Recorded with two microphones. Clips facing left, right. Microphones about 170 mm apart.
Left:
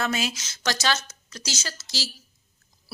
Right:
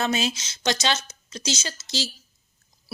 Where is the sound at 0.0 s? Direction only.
25° right (ahead or behind).